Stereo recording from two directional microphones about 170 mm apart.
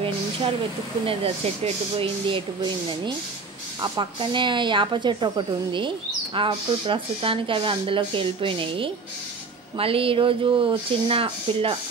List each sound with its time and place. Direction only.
1.0 s speech: 35° right (ahead or behind)
3.8 s speech: 25° right (ahead or behind)